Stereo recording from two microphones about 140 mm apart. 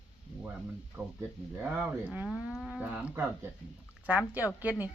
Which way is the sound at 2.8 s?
10° right (ahead or behind).